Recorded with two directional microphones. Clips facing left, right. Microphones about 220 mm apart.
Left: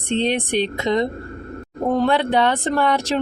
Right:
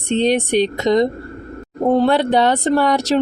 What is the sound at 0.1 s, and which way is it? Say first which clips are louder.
Speech: right 4 dB; 40° right (ahead or behind).